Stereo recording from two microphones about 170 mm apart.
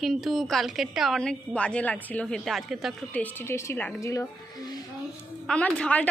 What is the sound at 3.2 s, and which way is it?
A woman's voice, 15° left (ahead or behind).